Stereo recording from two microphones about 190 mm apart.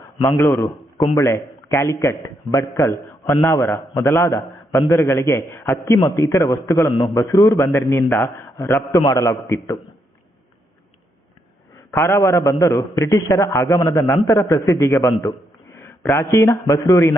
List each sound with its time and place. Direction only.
0.3 s a man's voice: 10° left (ahead or behind)
11.9 s a man's voice: 15° left (ahead or behind)